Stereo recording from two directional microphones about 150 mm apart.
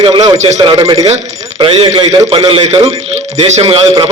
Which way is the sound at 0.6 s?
30° right (ahead or behind).